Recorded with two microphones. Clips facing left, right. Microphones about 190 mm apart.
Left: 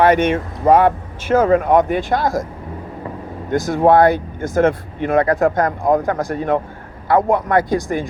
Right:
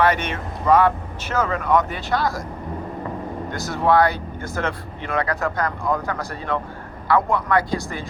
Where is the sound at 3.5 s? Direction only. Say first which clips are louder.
Left 6 dB; 50° left (ahead or behind).